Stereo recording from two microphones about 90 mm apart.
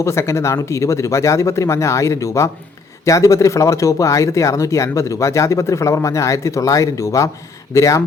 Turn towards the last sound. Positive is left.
turn(degrees=35)  # may be behind; listen again after turning